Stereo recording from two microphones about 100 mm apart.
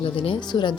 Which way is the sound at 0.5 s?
50° left (ahead or behind).